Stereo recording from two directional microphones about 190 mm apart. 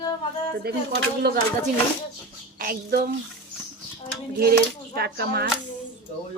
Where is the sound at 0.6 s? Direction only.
55° right (ahead or behind).